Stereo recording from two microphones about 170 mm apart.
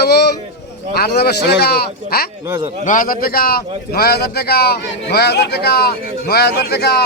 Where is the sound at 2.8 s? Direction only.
50° left (ahead or behind).